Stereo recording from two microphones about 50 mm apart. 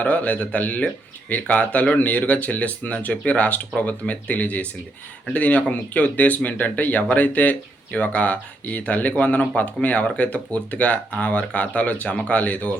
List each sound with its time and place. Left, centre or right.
0.0 s speech: left